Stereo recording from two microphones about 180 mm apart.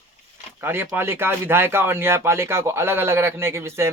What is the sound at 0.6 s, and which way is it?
Speech, 10° right (ahead or behind).